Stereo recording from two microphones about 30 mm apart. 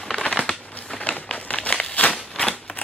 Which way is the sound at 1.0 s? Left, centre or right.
Left.